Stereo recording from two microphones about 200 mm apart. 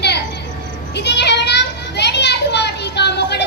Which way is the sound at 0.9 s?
60° left (ahead or behind).